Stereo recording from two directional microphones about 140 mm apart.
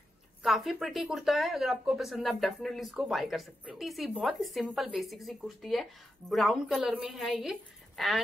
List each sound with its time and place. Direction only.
0.4 s speech: centre (ahead or behind)